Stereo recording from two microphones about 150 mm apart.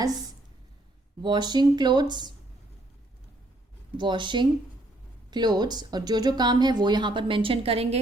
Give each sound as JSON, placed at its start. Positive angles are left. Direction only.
{"t": 1.2, "sound": "speech", "side_deg": -30}
{"t": 3.9, "sound": "speech", "side_deg": -30}